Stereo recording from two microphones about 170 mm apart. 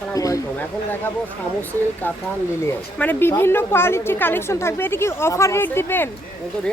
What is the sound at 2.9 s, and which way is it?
Speech, 10° left (ahead or behind).